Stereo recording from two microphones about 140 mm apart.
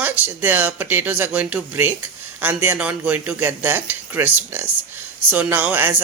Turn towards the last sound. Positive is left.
turn(degrees=-15)  # may be behind; listen again after turning